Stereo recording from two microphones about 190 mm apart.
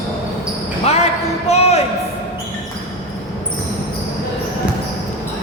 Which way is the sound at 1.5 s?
35° left (ahead or behind).